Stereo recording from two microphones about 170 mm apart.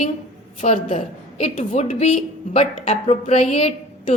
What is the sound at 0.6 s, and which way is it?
A woman's voice, 45° left (ahead or behind).